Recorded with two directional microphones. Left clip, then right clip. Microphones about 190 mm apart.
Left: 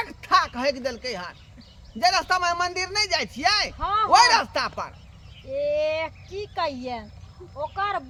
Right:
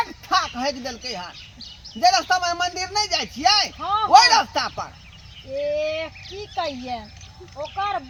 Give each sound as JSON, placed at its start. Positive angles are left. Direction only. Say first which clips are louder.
{"t": 0.0, "sound": "a sound", "louder": "even", "side_deg": 35}
{"t": 2.0, "sound": "speech", "louder": "right 3 dB", "side_deg": 35}
{"t": 3.8, "sound": "speech", "louder": "right 1 dB", "side_deg": 15}
{"t": 4.1, "sound": "speech", "louder": "right 4 dB", "side_deg": 35}
{"t": 5.6, "sound": "speech", "louder": "even", "side_deg": 20}